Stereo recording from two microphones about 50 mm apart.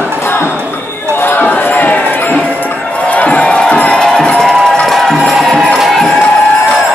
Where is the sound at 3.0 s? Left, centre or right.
Left; by 6.1 s centre.